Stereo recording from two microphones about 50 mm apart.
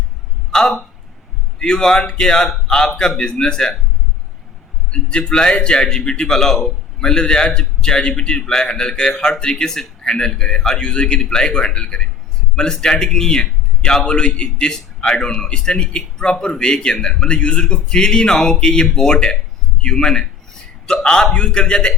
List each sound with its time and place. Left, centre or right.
0.5 s a man's voice: centre
4.9 s speech: centre
10.8 s a man's voice: centre